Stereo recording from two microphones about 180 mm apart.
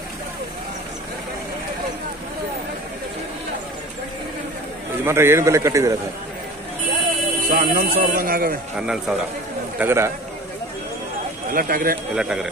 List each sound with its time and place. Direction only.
5.0 s a man's voice: 15° right (ahead or behind)
7.4 s speech: 55° right (ahead or behind)
8.7 s speech: 5° right (ahead or behind)
9.8 s a man's voice: 15° right (ahead or behind)
11.5 s speech: 55° right (ahead or behind)